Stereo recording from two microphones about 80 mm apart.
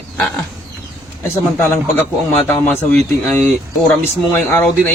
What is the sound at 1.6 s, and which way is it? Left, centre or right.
Speech, left.